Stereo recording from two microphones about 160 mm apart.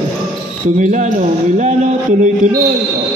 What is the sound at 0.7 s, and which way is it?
Mantra, 50° right (ahead or behind).